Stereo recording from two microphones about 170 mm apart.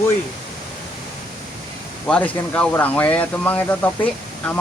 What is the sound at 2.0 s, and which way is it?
Speech, 5° left (ahead or behind).